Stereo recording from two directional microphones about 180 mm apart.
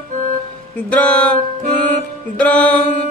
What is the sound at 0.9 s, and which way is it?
Music, 10° left (ahead or behind).